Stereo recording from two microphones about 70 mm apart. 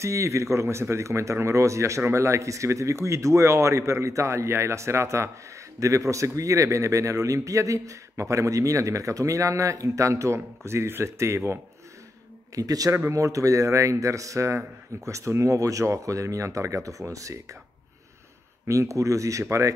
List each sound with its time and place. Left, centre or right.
0.0 s speech: right
12.5 s speech: right
12.9 s speech: right
18.7 s speech: right